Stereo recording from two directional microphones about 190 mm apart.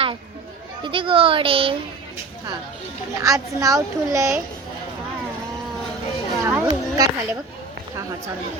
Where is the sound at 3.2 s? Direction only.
15° right (ahead or behind).